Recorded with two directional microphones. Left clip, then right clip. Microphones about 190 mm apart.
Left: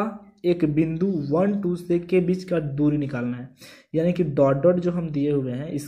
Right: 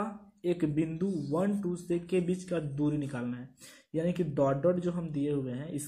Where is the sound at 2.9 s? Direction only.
15° left (ahead or behind).